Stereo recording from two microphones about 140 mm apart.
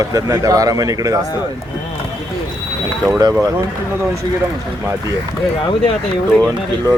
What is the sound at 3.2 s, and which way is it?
Speech, 20° right (ahead or behind).